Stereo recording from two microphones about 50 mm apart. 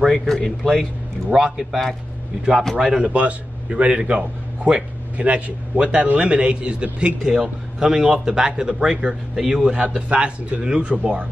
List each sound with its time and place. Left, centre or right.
0.0 s a man's voice: centre
3.0 s a man's voice: right